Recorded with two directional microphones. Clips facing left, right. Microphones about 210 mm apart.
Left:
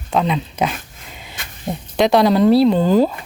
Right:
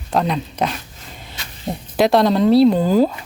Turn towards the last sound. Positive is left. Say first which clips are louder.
# even
turn(degrees=-5)  # may be behind; listen again after turning